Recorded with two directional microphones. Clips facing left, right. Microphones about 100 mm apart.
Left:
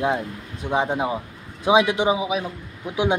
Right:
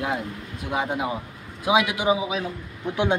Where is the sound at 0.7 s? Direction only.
25° left (ahead or behind).